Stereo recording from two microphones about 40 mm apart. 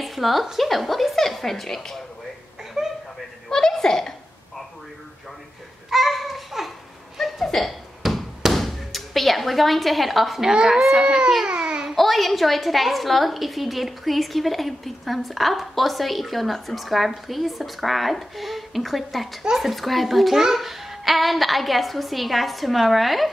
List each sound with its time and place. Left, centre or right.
0.0 s a woman's voice: centre
2.8 s a sound: centre
3.4 s a sound: centre
5.9 s babbling: centre
7.2 s a sound: centre
8.0 s a sound: centre
8.5 s speech: centre
10.5 s a child's voice: centre
11.1 s baby cry: centre
11.4 s babbling: right
11.9 s a woman's voice: centre
19.4 s a child's voice: centre
19.7 s a woman's voice: centre